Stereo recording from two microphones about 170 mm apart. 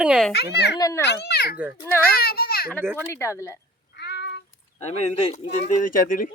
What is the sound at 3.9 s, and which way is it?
Child singing, 80° left.